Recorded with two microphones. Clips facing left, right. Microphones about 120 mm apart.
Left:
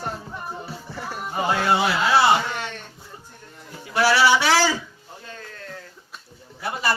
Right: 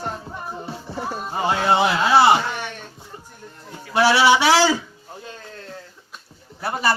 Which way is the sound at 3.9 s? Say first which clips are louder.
Right 2 dB; 20° right (ahead or behind).